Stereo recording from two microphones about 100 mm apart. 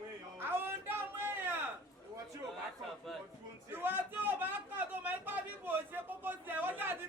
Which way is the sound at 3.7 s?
20° right (ahead or behind).